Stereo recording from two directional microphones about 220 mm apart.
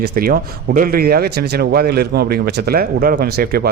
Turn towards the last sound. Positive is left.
turn(degrees=-45)  # may be behind; listen again after turning